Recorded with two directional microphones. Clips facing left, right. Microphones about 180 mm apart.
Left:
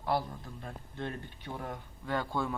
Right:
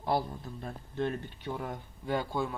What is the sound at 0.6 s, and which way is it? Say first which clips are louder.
Speech: right 7 dB; 35° right (ahead or behind).